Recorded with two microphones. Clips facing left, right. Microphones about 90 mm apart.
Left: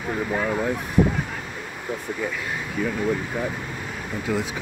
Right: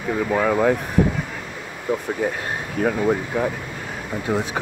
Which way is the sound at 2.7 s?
60° right (ahead or behind).